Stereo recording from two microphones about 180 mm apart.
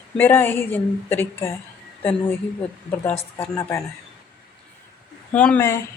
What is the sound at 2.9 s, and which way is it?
Speech, 10° left (ahead or behind).